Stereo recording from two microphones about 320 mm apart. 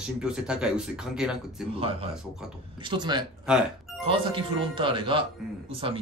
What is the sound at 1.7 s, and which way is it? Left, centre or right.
Speech, centre.